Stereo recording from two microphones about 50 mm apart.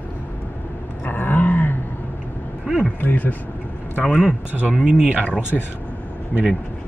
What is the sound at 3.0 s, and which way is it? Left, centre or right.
Speech, left.